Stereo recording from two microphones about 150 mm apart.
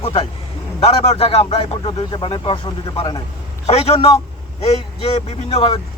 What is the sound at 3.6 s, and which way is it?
Speech, 45° left (ahead or behind).